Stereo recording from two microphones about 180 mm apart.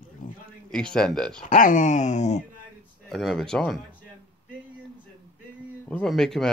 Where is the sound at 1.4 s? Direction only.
45° left (ahead or behind).